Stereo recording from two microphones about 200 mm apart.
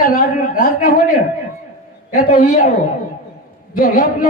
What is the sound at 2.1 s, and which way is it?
Speech, 40° left (ahead or behind).